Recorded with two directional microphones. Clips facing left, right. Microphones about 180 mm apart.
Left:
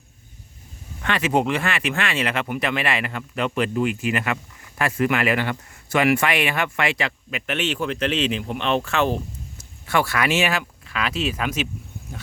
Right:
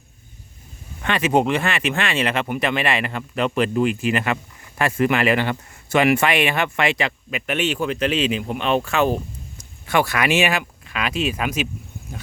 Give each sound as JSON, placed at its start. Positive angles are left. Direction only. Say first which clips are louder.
{"t": 1.0, "sound": "speech", "louder": "right 2 dB", "side_deg": -20}